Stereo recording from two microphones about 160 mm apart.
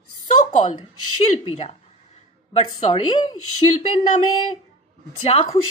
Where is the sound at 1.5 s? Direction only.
40° left (ahead or behind).